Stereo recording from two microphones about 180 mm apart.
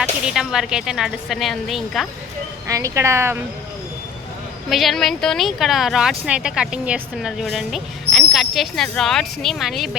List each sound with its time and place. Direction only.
0.0 s speech: 5° right (ahead or behind)
2.6 s a woman's voice: 15° right (ahead or behind)
4.7 s speech: centre (ahead or behind)